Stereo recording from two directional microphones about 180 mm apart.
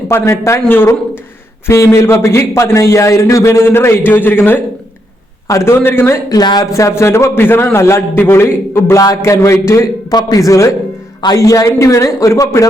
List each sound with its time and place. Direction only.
0.1 s a man's voice: 15° left (ahead or behind)